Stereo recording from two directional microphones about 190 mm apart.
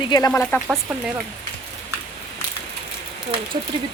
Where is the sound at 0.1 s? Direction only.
15° left (ahead or behind).